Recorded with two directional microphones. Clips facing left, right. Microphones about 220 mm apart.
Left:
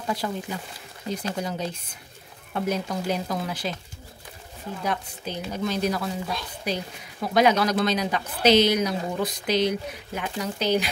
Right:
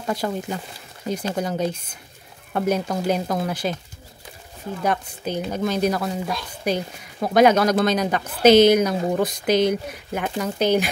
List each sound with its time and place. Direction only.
0.0 s speech: 45° right (ahead or behind)
4.8 s speech: 50° right (ahead or behind)